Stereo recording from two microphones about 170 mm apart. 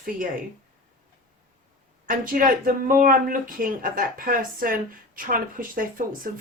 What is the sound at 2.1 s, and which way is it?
A woman's voice, 55° right (ahead or behind).